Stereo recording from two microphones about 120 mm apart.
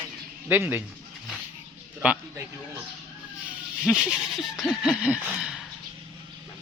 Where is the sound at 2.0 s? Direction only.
10° right (ahead or behind).